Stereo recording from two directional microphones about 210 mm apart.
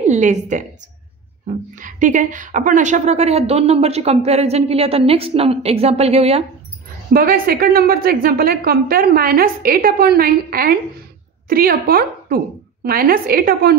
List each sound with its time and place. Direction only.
0.0 s a woman's voice: 35° right (ahead or behind)
1.8 s a woman's voice: 35° right (ahead or behind)
7.1 s a woman's voice: 45° right (ahead or behind)